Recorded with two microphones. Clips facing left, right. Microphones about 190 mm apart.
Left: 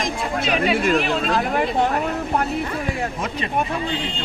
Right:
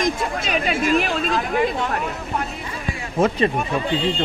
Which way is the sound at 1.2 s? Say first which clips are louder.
Left 1 dB; 50° left (ahead or behind).